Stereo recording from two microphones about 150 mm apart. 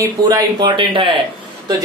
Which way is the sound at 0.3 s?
30° right (ahead or behind).